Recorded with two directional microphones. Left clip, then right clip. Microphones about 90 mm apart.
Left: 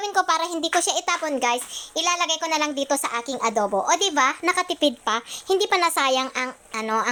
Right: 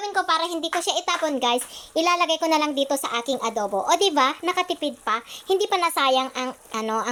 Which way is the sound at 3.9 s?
35° right (ahead or behind).